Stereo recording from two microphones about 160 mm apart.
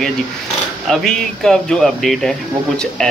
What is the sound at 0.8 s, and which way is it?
Speech, centre (ahead or behind).